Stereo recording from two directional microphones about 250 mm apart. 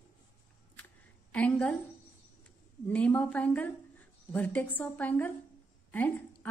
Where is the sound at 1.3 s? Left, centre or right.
Centre.